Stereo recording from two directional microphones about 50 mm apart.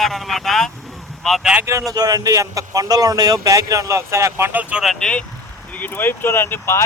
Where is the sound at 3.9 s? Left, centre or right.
Right.